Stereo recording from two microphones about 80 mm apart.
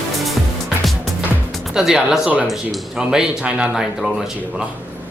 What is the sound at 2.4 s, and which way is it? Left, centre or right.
Speech, centre.